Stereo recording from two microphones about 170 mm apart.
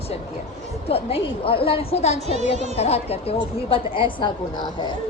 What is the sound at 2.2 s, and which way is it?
Speech, 40° right (ahead or behind).